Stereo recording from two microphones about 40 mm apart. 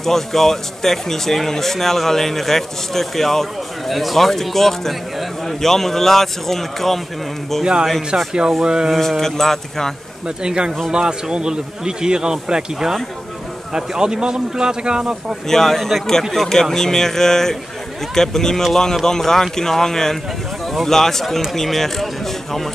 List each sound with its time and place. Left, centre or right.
0.0 s speech: centre
8.3 s speech: centre
8.9 s speech: centre
10.2 s a man's voice: right
15.4 s speech: centre